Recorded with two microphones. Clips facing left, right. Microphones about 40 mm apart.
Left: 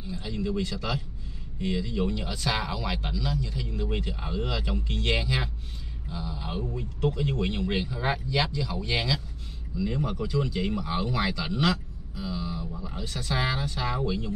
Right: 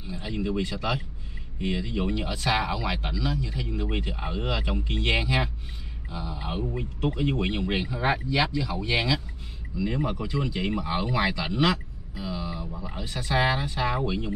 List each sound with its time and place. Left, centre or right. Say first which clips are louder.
0.0 s speech: right 1 dB; right